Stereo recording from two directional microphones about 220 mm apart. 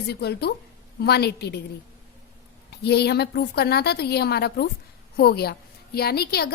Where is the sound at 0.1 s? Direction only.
45° left (ahead or behind).